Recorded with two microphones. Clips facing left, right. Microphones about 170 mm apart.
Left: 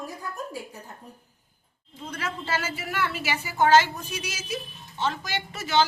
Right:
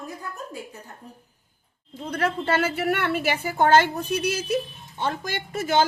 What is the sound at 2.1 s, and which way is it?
A woman's voice, 60° right (ahead or behind).